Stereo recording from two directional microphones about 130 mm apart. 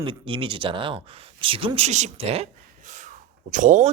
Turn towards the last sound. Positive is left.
turn(degrees=-75)  # may be behind; listen again after turning